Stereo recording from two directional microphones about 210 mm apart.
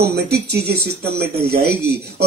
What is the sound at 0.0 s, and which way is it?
Speech, 50° right (ahead or behind).